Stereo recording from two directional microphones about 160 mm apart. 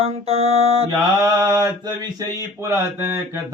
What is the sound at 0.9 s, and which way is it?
Mantra, 25° right (ahead or behind).